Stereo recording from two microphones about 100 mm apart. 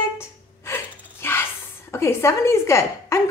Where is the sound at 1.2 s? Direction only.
25° left (ahead or behind).